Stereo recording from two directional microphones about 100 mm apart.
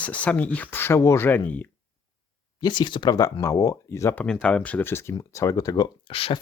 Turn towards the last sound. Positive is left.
turn(degrees=65)  # may be behind; listen again after turning